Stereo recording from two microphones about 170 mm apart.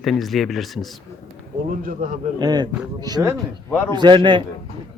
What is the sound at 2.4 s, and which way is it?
A man's voice, 25° right (ahead or behind).